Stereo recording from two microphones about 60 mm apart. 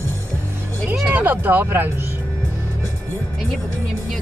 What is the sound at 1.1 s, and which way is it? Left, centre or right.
Speech, right.